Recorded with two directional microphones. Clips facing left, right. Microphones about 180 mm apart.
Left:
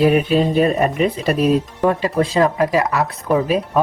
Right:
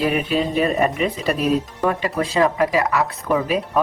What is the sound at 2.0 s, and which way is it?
Speech, 35° left (ahead or behind).